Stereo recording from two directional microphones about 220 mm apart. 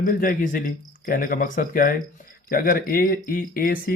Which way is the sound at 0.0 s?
40° left (ahead or behind).